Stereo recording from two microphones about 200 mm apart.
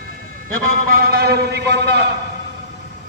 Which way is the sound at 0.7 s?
50° right (ahead or behind).